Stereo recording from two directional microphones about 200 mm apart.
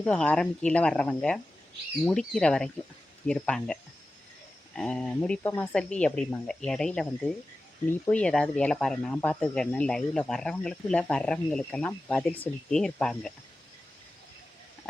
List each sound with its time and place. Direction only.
0.0 s speech: 5° left (ahead or behind)